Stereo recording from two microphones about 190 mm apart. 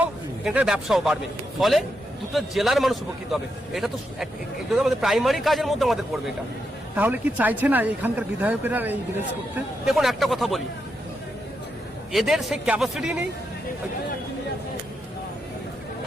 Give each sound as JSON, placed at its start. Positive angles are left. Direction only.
{"t": 0.0, "sound": "a man's voice", "side_deg": -5}
{"t": 12.1, "sound": "a man's voice", "side_deg": 0}